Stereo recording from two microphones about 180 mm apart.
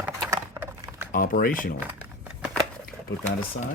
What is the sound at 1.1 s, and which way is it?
Speech, 50° left (ahead or behind).